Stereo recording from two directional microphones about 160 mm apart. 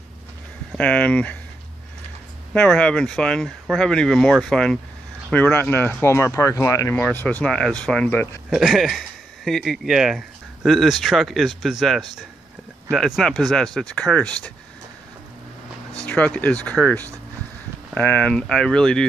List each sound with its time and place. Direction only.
0.7 s speech: 10° left (ahead or behind)
2.5 s speech: 5° left (ahead or behind)
7.0 s speech: 10° left (ahead or behind)
8.5 s speech: 5° right (ahead or behind)
16.1 s speech: 10° left (ahead or behind)